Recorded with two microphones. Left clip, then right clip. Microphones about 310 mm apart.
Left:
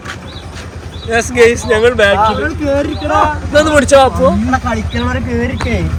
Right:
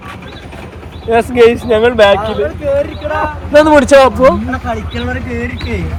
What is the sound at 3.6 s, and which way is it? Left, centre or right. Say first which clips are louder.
Speech: right 3 dB; centre.